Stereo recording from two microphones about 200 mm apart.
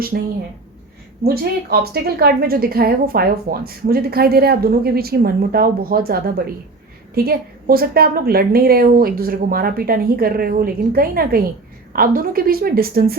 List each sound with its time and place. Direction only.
0.1 s a woman's voice: 50° right (ahead or behind)